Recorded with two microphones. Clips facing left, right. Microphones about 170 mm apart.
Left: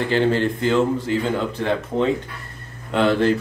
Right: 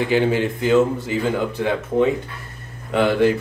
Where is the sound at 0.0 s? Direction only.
10° right (ahead or behind).